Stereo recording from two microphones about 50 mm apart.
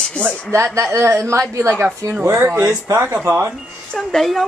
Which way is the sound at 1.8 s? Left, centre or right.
Right.